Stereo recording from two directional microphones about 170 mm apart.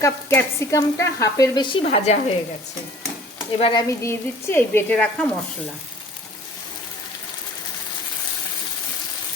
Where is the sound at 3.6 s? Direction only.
35° left (ahead or behind).